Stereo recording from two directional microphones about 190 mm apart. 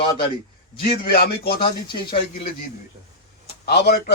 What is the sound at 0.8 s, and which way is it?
Speech, 55° left (ahead or behind).